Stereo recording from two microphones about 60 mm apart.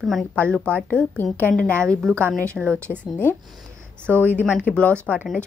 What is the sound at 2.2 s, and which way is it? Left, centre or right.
Speech, right.